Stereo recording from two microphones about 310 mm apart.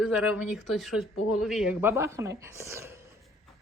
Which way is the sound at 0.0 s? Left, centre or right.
Centre.